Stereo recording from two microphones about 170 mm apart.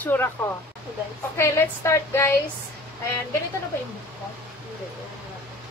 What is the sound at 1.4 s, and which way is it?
Speech, 15° left (ahead or behind).